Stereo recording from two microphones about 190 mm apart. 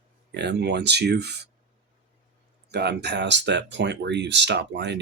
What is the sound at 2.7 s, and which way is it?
Speech, 60° right (ahead or behind).